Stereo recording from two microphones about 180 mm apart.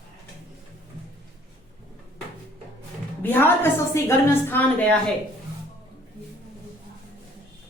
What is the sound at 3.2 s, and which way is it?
A woman's voice, 10° left (ahead or behind).